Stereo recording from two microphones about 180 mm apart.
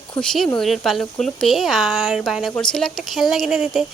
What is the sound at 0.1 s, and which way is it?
Speech, 5° left (ahead or behind).